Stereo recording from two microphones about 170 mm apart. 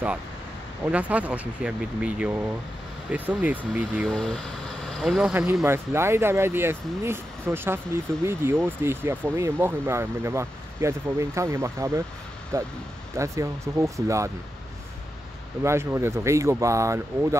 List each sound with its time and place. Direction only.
0.9 s speech: 10° right (ahead or behind)
4.1 s speech: 5° left (ahead or behind); by 14.3 s 20° right (ahead or behind)
15.6 s speech: 15° right (ahead or behind)